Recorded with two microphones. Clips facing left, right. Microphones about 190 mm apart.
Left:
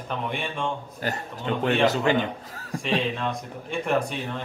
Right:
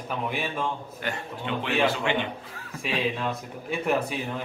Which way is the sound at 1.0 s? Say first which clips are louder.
Left 3 dB; 40° left (ahead or behind).